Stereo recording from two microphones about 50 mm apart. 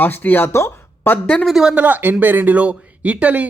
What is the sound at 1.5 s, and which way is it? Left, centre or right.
Speech, centre.